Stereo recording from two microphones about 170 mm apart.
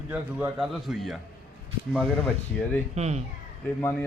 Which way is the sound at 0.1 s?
10° right (ahead or behind).